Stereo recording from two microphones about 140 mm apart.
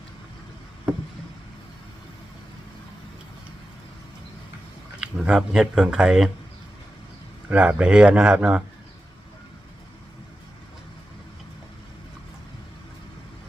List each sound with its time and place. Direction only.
4.9 s speech: 5° right (ahead or behind)
7.5 s speech: 10° right (ahead or behind)